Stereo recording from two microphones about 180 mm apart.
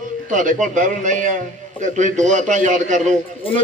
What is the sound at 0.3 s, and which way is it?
A man's voice, 45° right (ahead or behind).